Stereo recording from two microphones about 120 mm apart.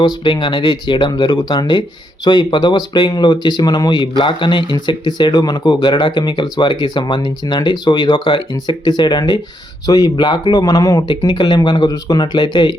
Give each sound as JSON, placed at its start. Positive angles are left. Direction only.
{"t": 0.3, "sound": "speech", "side_deg": 45}
{"t": 11.3, "sound": "speech", "side_deg": 40}